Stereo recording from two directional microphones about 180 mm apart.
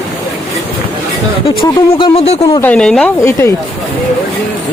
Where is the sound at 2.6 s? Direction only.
5° left (ahead or behind).